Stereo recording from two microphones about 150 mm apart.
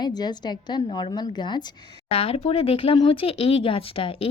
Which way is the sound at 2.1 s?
40° left (ahead or behind).